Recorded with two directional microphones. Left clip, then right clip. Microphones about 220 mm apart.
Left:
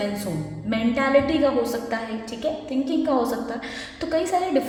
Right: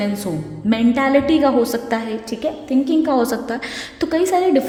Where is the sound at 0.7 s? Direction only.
55° right (ahead or behind).